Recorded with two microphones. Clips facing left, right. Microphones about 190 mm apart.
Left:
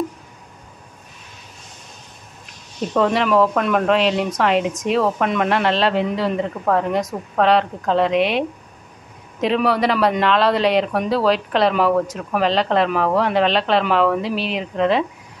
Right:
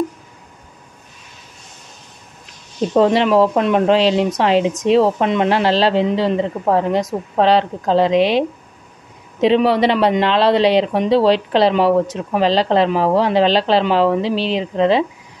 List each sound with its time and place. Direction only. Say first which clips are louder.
2.9 s a woman's voice: right 4 dB; 30° right (ahead or behind)